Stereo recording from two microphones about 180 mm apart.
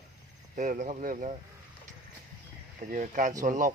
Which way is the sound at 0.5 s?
45° right (ahead or behind).